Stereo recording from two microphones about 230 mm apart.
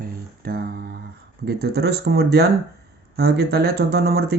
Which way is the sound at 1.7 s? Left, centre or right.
Right.